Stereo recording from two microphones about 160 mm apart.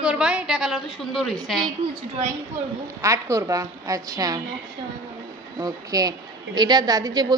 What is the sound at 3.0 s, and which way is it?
A woman's voice, 20° right (ahead or behind).